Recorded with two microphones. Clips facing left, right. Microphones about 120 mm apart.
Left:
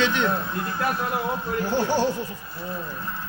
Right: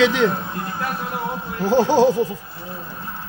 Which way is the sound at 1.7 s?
90° right.